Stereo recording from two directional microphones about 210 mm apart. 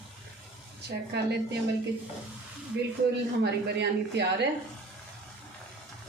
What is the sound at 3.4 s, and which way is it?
Speech, 55° right (ahead or behind).